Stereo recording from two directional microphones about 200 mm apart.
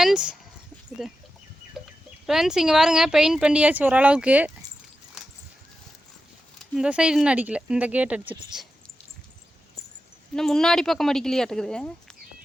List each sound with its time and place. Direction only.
0.0 s a woman's voice: 5° right (ahead or behind)
2.2 s a woman's voice: centre (ahead or behind)
6.7 s a woman's voice: 5° right (ahead or behind)
10.3 s a woman's voice: centre (ahead or behind)